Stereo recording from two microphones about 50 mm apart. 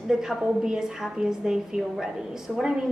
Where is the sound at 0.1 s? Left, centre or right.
Centre.